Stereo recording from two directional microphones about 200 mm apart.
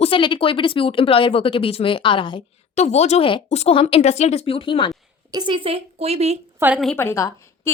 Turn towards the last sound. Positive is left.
turn(degrees=15)  # may be behind; listen again after turning